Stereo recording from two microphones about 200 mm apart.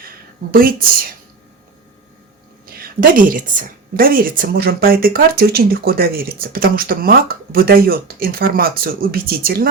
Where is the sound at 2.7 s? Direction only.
45° right (ahead or behind).